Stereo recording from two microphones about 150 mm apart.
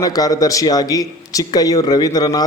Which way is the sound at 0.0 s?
25° left (ahead or behind).